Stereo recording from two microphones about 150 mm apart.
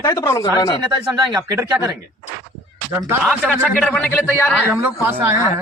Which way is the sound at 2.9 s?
20° right (ahead or behind).